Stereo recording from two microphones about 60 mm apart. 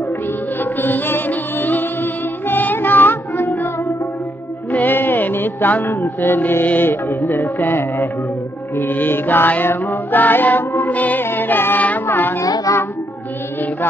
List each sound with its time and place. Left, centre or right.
0.6 s music: left
4.6 s music: left
12.4 s music: left